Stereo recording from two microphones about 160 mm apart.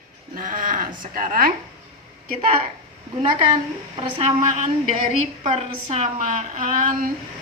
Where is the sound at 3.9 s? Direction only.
35° right (ahead or behind).